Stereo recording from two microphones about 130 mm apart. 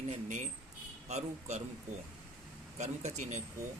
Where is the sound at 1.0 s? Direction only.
60° right (ahead or behind).